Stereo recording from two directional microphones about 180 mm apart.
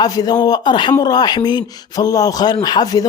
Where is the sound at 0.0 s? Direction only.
20° left (ahead or behind).